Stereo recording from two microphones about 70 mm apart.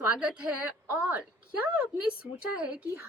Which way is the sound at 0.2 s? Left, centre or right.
Centre.